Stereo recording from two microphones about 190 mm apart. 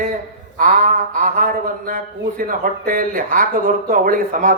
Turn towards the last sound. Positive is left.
turn(degrees=-45)  # may be behind; listen again after turning